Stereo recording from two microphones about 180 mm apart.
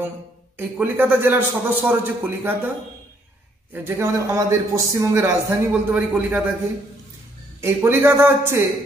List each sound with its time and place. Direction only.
0.6 s a man's voice: 10° right (ahead or behind)
3.7 s a man's voice: 15° right (ahead or behind)
7.6 s a man's voice: 15° right (ahead or behind)